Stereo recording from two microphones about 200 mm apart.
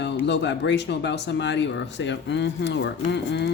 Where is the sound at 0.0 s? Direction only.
60° left (ahead or behind).